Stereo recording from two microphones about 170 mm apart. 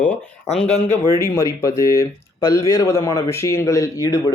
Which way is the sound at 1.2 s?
20° left (ahead or behind).